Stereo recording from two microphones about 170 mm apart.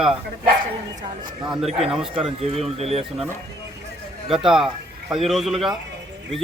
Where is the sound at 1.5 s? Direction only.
35° right (ahead or behind).